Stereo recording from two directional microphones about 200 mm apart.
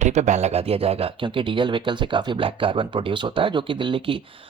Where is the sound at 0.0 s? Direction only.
35° right (ahead or behind).